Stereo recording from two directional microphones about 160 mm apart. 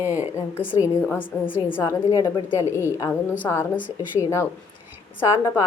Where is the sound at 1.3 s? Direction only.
20° left (ahead or behind).